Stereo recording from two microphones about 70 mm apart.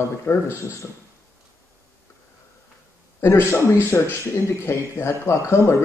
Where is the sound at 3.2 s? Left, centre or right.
Left.